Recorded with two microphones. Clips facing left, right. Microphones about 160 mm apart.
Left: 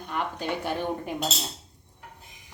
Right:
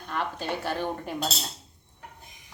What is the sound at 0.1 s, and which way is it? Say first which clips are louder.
A woman's voice: left 1 dB; 15° left (ahead or behind).